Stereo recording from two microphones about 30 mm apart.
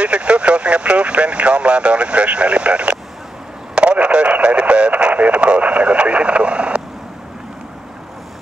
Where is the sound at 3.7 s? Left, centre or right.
Right.